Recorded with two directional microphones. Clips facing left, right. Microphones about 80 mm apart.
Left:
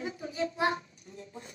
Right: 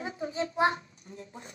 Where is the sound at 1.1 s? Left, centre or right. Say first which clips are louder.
Right 4 dB; right.